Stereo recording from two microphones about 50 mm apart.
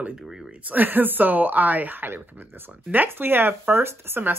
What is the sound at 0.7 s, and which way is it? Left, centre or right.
Speech, right.